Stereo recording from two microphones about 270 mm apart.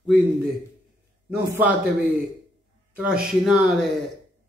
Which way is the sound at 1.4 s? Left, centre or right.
Centre.